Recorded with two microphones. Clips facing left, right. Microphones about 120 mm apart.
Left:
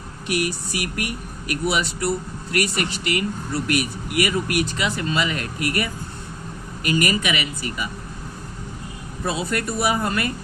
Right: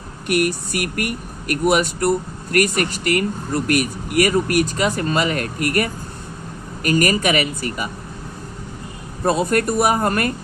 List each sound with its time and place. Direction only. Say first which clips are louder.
0.3 s speech: right 5 dB; 55° right (ahead or behind)
9.2 s speech: right 7 dB; 50° right (ahead or behind)